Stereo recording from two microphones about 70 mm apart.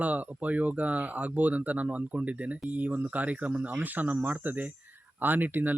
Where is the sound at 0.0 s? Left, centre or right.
Right.